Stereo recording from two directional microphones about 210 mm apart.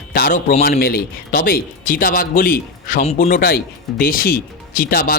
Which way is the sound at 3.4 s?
45° left (ahead or behind).